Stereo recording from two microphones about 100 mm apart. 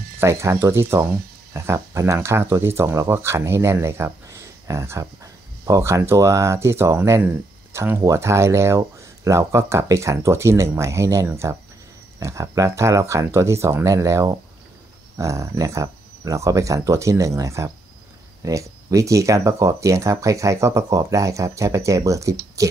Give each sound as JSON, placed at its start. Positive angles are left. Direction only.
{"t": 0.2, "sound": "speech", "side_deg": -30}